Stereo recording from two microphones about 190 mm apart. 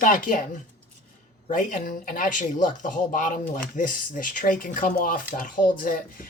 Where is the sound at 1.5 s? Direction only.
45° left (ahead or behind).